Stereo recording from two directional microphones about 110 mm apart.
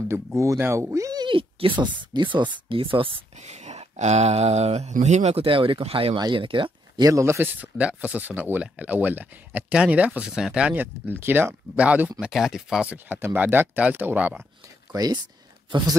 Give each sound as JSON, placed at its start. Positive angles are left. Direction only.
{"t": 0.1, "sound": "speech", "side_deg": -25}
{"t": 1.2, "sound": "speech", "side_deg": -50}
{"t": 3.4, "sound": "speech", "side_deg": -90}
{"t": 7.0, "sound": "speech", "side_deg": -30}
{"t": 14.9, "sound": "speech", "side_deg": -35}